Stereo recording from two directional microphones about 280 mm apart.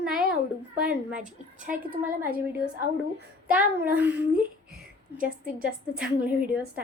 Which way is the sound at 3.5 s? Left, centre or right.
Centre.